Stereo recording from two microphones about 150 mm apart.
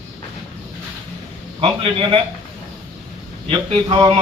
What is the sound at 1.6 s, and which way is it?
Speech, 35° right (ahead or behind).